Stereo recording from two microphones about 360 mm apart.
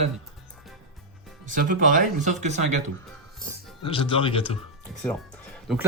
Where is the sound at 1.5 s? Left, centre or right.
Right.